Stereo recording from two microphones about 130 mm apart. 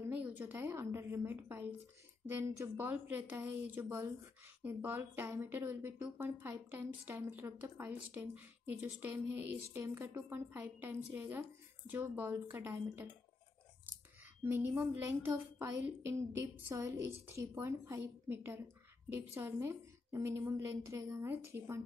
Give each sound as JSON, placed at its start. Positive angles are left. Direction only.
{"t": 0.0, "sound": "a woman's voice", "side_deg": -15}
{"t": 14.4, "sound": "a woman's voice", "side_deg": -15}